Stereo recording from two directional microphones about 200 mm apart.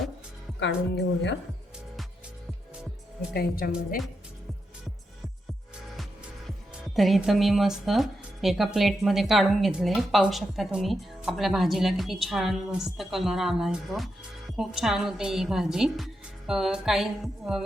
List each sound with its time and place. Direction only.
3.3 s speech: 45° left (ahead or behind)
3.7 s speech: centre (ahead or behind)
6.8 s speech: centre (ahead or behind)